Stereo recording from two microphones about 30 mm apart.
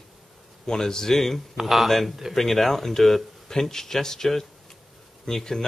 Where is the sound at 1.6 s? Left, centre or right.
Centre.